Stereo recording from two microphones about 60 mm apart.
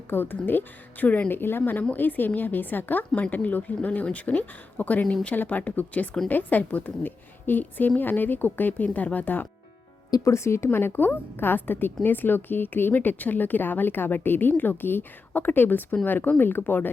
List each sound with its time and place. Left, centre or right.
0.1 s a woman's voice: left
10.3 s a woman's voice: left